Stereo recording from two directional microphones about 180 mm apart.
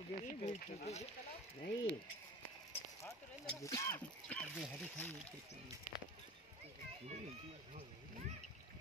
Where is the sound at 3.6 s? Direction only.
15° left (ahead or behind).